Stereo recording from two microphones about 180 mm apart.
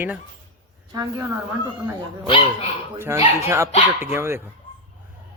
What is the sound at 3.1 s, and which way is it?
A man's voice, 15° right (ahead or behind).